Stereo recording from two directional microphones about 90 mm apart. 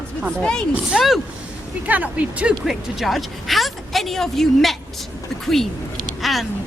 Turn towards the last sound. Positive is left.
turn(degrees=0)  # may be behind; listen again after turning